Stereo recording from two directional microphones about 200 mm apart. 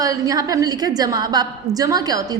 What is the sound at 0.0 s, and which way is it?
A woman's voice, 15° right (ahead or behind).